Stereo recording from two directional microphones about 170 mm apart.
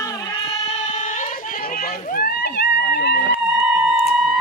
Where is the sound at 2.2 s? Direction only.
70° left (ahead or behind).